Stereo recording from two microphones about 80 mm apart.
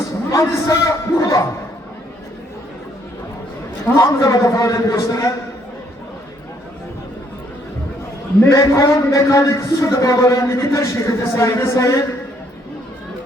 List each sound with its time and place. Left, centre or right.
0.1 s a man's voice: left
3.9 s a man's voice: left
8.4 s a man's voice: left